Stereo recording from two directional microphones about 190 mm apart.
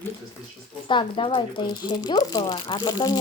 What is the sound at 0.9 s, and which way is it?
Speech, 25° left (ahead or behind).